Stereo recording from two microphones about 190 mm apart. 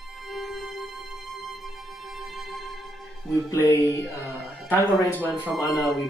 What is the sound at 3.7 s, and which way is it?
Speech, 10° left (ahead or behind).